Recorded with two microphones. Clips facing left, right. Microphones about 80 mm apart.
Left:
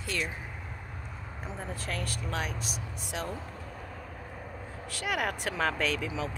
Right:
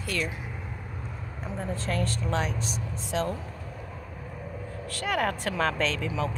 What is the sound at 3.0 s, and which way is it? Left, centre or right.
Speech, centre.